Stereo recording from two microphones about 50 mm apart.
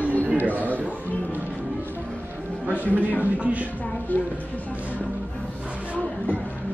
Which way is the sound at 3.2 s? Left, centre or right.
Right.